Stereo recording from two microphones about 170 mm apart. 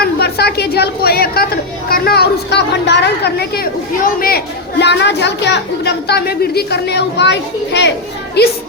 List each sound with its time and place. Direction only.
0.0 s a sound: 70° left (ahead or behind)
1.9 s a woman's voice: 65° left (ahead or behind); by 7.9 s 90° left
8.4 s speech: 75° left (ahead or behind)